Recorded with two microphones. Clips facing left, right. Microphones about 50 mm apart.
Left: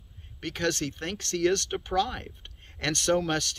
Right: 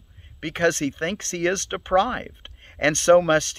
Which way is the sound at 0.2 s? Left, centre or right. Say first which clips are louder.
Right 8 dB; right.